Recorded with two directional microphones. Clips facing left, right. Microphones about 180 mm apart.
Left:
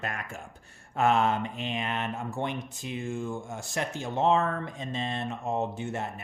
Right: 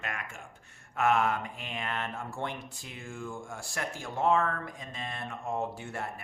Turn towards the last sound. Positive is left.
turn(degrees=20)  # may be behind; listen again after turning